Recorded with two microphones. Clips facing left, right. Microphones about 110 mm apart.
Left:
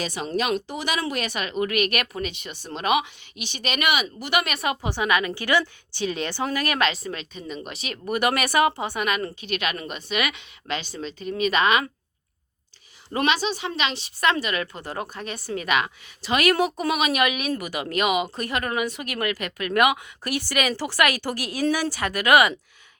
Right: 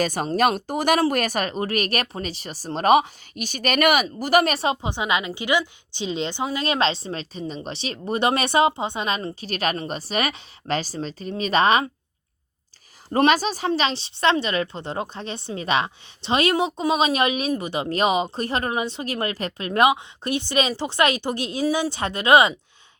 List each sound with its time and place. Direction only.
0.0 s speech: 45° right (ahead or behind)
13.1 s speech: 45° right (ahead or behind); by 22.5 s 25° right (ahead or behind)